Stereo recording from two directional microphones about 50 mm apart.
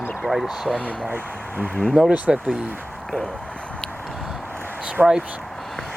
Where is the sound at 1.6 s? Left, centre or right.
Centre.